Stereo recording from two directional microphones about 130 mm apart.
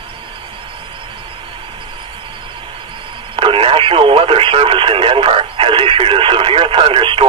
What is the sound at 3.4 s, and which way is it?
Radio, 45° right (ahead or behind).